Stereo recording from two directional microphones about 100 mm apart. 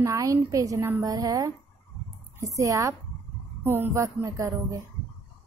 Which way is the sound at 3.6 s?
20° right (ahead or behind).